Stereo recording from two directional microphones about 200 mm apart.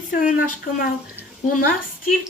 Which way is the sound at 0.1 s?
45° left (ahead or behind).